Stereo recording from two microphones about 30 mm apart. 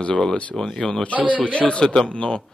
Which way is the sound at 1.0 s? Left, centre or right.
Left.